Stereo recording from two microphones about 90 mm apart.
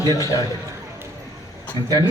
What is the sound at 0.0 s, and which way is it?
Speech, 40° right (ahead or behind).